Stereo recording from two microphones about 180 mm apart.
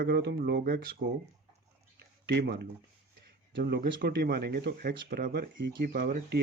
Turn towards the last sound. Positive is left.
turn(degrees=-50)  # may be behind; listen again after turning